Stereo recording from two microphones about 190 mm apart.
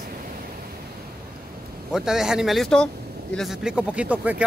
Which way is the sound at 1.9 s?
5° right (ahead or behind).